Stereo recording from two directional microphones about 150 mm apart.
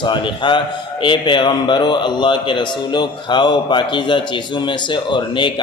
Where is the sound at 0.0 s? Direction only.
30° left (ahead or behind).